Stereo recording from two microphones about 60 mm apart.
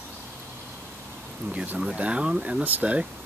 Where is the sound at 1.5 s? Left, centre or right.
Right.